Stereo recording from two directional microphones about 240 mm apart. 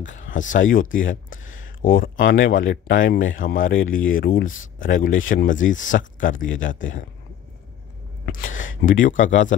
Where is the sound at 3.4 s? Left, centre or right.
Left.